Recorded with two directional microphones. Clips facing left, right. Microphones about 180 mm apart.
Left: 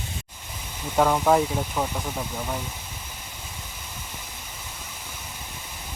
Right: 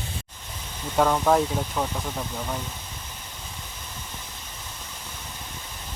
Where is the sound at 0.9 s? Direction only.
5° left (ahead or behind).